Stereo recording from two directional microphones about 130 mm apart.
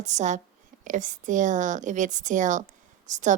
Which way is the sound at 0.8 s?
80° right.